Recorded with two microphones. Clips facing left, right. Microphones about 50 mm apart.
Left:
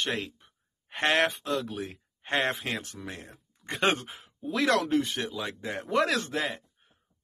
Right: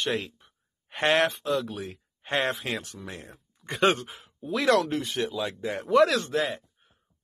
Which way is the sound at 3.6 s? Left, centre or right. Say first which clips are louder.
Right 4 dB; centre.